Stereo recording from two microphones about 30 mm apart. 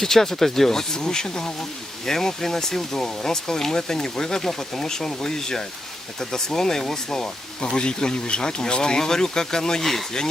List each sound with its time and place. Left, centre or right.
0.0 s speech: centre
7.6 s speech: left